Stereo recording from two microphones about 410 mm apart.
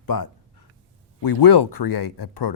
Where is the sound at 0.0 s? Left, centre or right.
Left.